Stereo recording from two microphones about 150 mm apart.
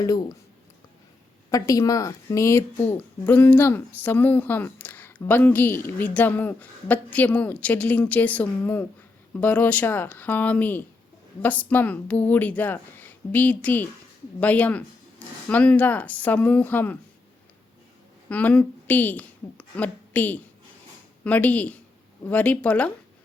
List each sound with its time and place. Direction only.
0.0 s speech: 25° left (ahead or behind)
1.5 s speech: 20° left (ahead or behind)
18.3 s a woman's voice: 10° left (ahead or behind)